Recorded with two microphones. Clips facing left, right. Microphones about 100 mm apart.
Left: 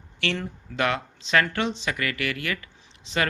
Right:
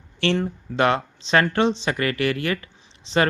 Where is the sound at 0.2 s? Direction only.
25° right (ahead or behind).